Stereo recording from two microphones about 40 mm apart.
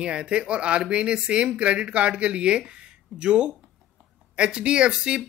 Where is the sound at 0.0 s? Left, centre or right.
Right.